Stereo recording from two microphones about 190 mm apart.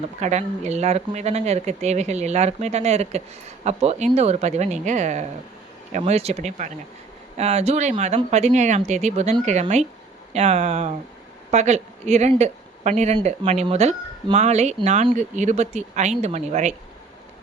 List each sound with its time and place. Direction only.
0.2 s speech: 35° right (ahead or behind)